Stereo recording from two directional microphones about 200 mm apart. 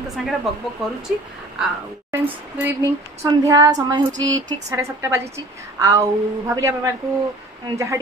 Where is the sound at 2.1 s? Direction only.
10° right (ahead or behind).